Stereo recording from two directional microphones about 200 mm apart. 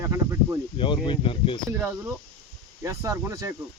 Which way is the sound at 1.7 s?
15° right (ahead or behind).